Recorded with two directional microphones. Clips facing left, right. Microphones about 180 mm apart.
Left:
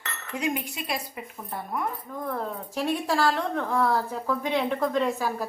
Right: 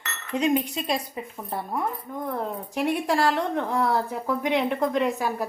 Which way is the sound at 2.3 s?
20° right (ahead or behind).